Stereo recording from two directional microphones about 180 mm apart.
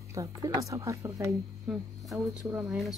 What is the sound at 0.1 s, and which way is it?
Speech, 20° right (ahead or behind).